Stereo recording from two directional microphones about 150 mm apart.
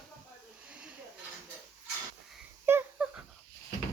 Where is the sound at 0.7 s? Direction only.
5° right (ahead or behind).